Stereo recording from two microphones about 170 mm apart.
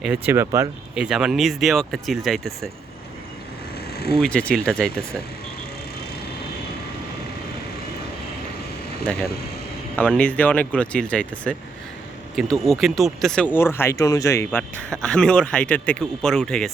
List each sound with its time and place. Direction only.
0.0 s speech: 10° right (ahead or behind)
0.9 s speech: 5° right (ahead or behind)
3.9 s vehicle: 65° left (ahead or behind)
4.2 s speech: 5° left (ahead or behind)
9.9 s speech: 10° left (ahead or behind)